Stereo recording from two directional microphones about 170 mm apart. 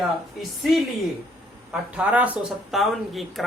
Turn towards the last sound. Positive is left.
turn(degrees=0)  # may be behind; listen again after turning